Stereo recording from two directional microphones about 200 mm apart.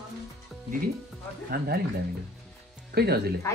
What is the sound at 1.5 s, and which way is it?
Speech, 50° right (ahead or behind).